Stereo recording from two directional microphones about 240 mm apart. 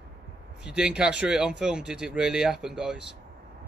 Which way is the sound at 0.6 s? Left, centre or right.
Centre.